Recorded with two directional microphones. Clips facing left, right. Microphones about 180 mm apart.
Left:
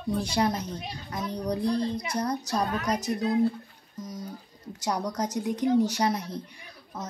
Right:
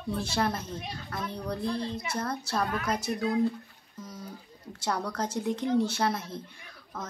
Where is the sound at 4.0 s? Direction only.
10° left (ahead or behind).